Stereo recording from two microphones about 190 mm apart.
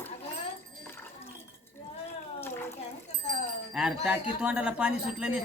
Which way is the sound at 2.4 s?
10° left (ahead or behind).